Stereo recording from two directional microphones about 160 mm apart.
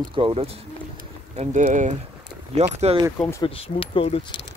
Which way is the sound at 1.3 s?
45° right (ahead or behind).